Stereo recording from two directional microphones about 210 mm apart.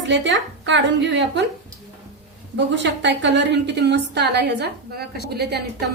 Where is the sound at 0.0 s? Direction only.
60° right (ahead or behind).